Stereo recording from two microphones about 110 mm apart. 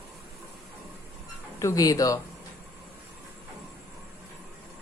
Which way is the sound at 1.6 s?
30° left (ahead or behind).